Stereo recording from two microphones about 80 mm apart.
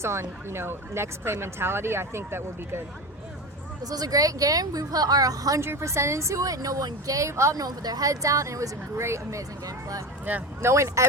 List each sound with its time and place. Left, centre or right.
0.0 s speech: right
3.8 s speech: right
5.5 s speech: right
7.5 s speech: right
10.6 s speech: right